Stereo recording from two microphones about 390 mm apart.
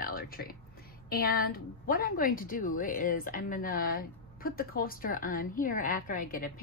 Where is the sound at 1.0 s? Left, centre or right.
Left.